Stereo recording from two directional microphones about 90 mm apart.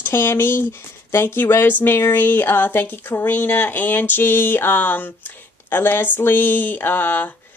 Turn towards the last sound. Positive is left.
turn(degrees=20)  # may be behind; listen again after turning